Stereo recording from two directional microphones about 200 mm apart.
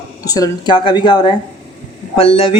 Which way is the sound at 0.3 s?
20° left (ahead or behind).